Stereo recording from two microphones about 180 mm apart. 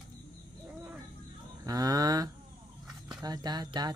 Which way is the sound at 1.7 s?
20° right (ahead or behind).